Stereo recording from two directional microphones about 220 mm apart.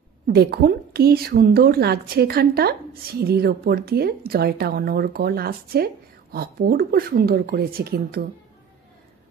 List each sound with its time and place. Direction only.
0.3 s a woman's voice: 45° right (ahead or behind)